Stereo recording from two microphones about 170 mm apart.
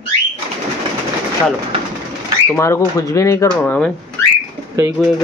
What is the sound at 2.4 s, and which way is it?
Speech, 15° left (ahead or behind).